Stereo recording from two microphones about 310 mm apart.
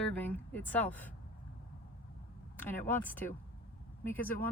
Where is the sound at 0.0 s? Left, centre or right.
Centre.